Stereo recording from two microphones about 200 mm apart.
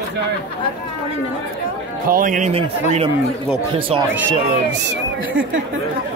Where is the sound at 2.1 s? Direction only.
40° right (ahead or behind); by 4.0 s 25° right (ahead or behind).